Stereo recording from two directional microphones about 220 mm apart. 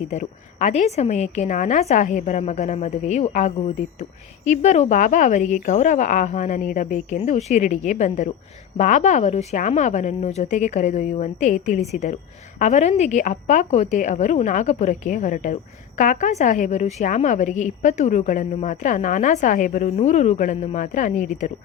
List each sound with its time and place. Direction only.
0.1 s a woman's voice: 30° left (ahead or behind)